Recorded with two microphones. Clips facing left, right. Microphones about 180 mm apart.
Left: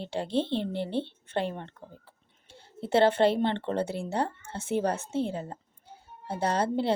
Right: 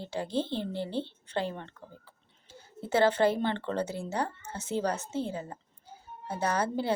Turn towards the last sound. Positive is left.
turn(degrees=25)  # may be behind; listen again after turning